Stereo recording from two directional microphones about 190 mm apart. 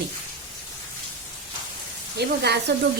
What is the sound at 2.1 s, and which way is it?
Speech, 60° right (ahead or behind).